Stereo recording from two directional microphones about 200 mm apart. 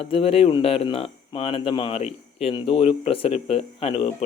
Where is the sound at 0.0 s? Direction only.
30° left (ahead or behind).